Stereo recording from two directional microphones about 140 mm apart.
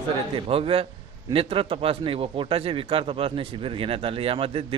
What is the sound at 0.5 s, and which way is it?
A man's voice, 40° right (ahead or behind).